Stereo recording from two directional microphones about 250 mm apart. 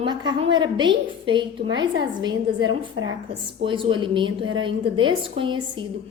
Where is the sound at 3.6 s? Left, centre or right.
Centre.